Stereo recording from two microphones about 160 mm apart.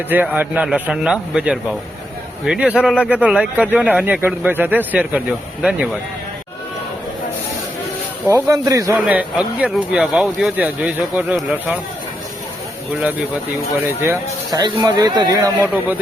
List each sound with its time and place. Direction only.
0.1 s speech: 10° right (ahead or behind)
8.3 s speech: 15° right (ahead or behind)
9.0 s speech: 5° right (ahead or behind)
13.0 s speech: 10° right (ahead or behind)
14.6 s speech: 25° right (ahead or behind)